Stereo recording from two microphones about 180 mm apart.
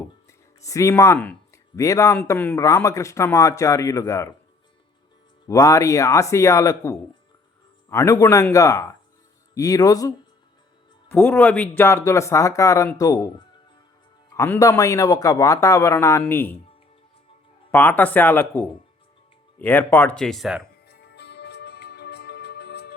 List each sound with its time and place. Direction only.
0.3 s speech: 15° left (ahead or behind)
5.5 s speech: 20° left (ahead or behind)
17.7 s speech: 10° left (ahead or behind)
20.8 s music: 65° left (ahead or behind)